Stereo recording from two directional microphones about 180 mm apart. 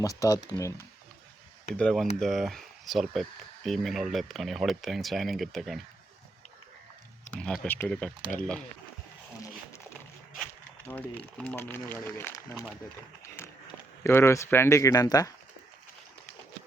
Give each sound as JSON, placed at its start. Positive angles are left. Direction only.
{"t": 0.0, "sound": "speech", "side_deg": 20}
{"t": 1.7, "sound": "speech", "side_deg": 5}
{"t": 7.3, "sound": "speech", "side_deg": 5}
{"t": 10.8, "sound": "speech", "side_deg": 10}
{"t": 13.2, "sound": "run", "side_deg": 15}
{"t": 14.0, "sound": "speech", "side_deg": 15}